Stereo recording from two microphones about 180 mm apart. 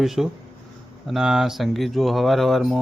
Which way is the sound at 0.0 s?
Centre (ahead or behind).